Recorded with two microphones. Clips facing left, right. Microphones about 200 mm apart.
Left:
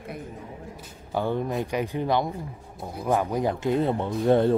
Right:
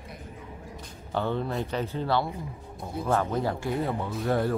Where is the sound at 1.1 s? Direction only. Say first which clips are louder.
Left 2 dB; 10° left (ahead or behind).